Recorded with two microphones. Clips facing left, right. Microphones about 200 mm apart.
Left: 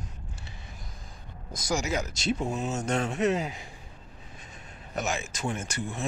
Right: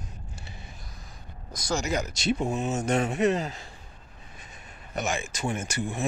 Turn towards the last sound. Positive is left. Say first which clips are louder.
# right 3 dB
turn(degrees=-5)  # may be behind; listen again after turning